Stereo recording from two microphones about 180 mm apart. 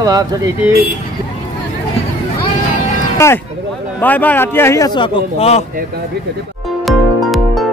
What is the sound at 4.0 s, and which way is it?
A man's voice, 10° left (ahead or behind).